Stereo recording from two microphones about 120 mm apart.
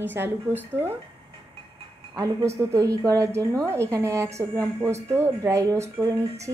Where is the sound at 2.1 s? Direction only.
30° right (ahead or behind).